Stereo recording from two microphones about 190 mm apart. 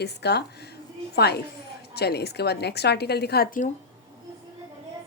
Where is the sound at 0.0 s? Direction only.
60° left (ahead or behind).